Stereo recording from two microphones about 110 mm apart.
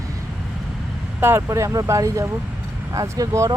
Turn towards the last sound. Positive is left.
turn(degrees=-30)  # may be behind; listen again after turning